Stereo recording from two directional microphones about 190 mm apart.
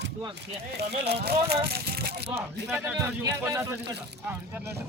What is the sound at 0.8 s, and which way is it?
Speech, 60° right (ahead or behind).